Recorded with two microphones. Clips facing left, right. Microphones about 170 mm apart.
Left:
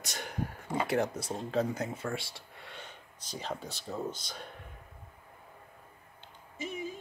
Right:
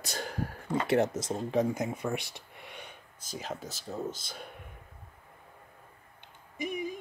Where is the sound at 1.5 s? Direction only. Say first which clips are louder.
Right 2 dB; 15° right (ahead or behind).